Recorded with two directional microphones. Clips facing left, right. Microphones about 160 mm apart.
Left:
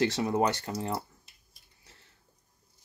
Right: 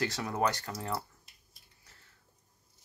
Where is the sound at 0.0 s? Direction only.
25° left (ahead or behind).